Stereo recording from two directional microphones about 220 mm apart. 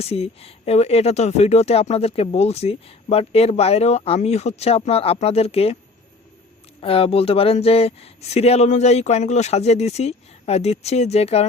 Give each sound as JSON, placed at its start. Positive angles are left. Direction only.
{"t": 0.0, "sound": "speech", "side_deg": 25}
{"t": 6.8, "sound": "speech", "side_deg": 25}